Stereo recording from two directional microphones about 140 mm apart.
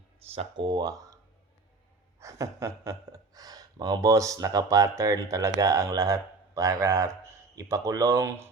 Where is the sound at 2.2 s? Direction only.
20° right (ahead or behind).